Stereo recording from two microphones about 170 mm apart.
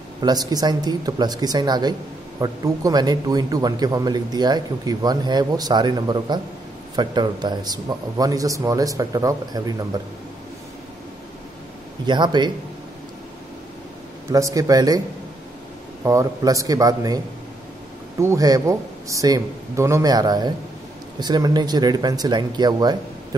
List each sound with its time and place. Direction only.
0.2 s a man's voice: 25° right (ahead or behind)
12.1 s a man's voice: 25° right (ahead or behind)
14.3 s a man's voice: 20° right (ahead or behind)
16.0 s a man's voice: 20° right (ahead or behind)
18.2 s a man's voice: 20° right (ahead or behind)